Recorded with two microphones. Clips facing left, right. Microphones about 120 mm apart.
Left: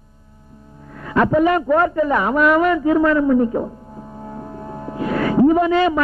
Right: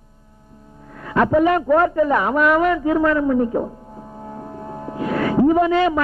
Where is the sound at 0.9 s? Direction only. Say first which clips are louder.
Even; 15° right (ahead or behind).